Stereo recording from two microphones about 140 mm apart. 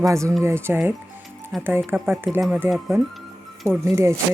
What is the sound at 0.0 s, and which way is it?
Speech, 20° right (ahead or behind).